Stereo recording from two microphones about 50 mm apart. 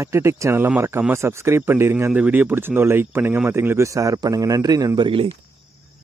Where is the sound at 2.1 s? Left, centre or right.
Right.